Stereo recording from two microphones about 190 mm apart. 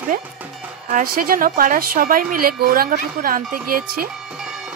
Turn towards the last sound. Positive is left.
turn(degrees=-50)  # may be behind; listen again after turning